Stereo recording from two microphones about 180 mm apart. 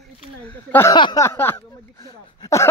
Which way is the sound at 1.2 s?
15° left (ahead or behind).